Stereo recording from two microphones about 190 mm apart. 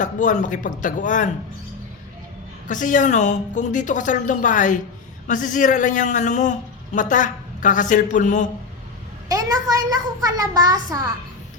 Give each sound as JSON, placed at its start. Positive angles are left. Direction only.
{"t": 0.0, "sound": "a man's voice", "side_deg": 40}
{"t": 2.6, "sound": "a man's voice", "side_deg": 40}
{"t": 9.3, "sound": "a child's voice", "side_deg": -20}